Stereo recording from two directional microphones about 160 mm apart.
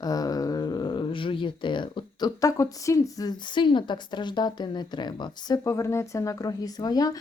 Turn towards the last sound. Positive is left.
turn(degrees=25)  # may be behind; listen again after turning